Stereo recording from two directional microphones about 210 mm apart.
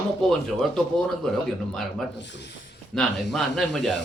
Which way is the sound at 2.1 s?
55° left (ahead or behind).